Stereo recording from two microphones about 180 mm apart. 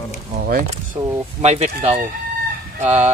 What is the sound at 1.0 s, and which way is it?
Speech, 25° right (ahead or behind).